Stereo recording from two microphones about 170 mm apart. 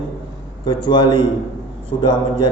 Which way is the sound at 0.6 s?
25° left (ahead or behind).